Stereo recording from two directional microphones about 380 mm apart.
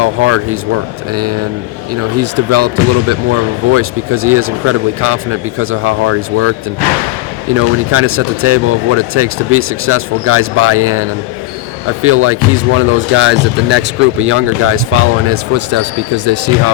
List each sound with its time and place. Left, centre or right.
0.0 s speech: right
7.5 s speech: right